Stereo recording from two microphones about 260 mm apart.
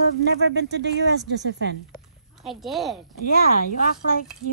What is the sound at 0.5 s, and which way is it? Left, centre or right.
Speech, right.